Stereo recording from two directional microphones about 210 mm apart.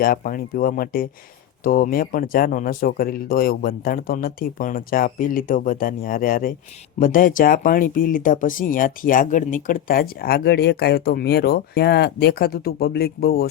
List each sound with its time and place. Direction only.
0.0 s speech: 45° left (ahead or behind)